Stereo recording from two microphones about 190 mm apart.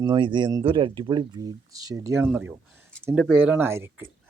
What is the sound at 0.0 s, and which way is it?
Speech, 25° right (ahead or behind).